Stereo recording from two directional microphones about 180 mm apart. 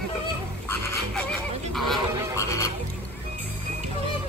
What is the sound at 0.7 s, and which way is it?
Music, 10° left (ahead or behind).